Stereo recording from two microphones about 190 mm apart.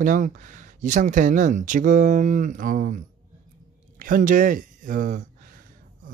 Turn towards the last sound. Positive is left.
turn(degrees=-40)  # may be behind; listen again after turning